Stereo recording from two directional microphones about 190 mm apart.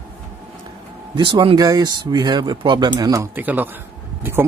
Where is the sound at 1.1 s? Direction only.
25° right (ahead or behind).